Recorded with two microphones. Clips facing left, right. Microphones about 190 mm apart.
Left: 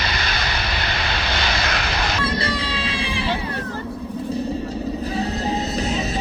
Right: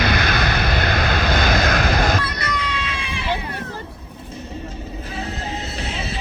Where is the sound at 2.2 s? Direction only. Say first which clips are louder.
Left 3 dB; 30° left (ahead or behind).